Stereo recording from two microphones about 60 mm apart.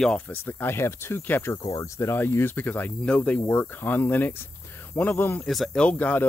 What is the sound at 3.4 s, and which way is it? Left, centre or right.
Speech, left.